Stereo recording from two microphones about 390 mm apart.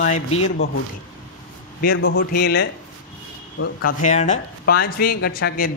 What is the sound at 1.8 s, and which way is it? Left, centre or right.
A man's voice, left.